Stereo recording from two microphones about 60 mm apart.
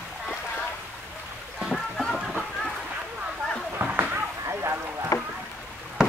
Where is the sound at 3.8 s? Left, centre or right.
Right.